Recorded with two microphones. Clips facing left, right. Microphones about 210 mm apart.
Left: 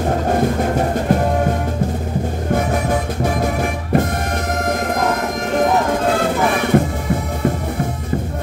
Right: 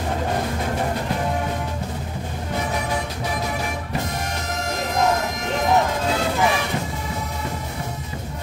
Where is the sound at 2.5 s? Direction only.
50° left (ahead or behind).